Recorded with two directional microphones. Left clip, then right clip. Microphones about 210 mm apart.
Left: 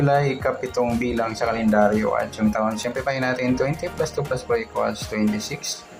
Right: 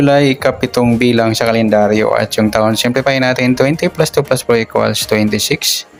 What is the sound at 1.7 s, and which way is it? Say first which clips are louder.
Speech: right 6 dB; 65° right (ahead or behind).